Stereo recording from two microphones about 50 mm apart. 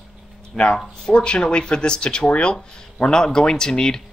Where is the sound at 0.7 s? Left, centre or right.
Centre.